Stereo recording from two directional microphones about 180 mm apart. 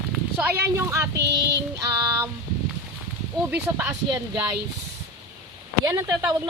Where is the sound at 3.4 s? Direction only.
10° right (ahead or behind).